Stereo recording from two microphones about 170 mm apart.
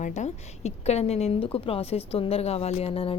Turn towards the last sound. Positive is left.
turn(degrees=35)  # may be behind; listen again after turning